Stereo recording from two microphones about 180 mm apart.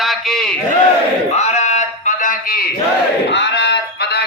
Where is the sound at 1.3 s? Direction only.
40° left (ahead or behind); by 2.7 s 55° left (ahead or behind).